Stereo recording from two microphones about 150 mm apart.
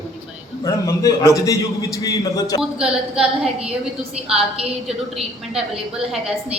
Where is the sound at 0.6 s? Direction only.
20° left (ahead or behind).